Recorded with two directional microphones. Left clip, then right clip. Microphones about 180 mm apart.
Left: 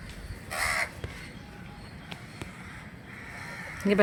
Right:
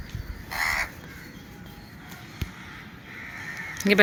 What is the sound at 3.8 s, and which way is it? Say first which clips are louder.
Speech: right 5 dB; 5° left (ahead or behind).